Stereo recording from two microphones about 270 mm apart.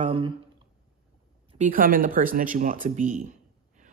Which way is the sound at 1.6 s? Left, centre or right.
Right.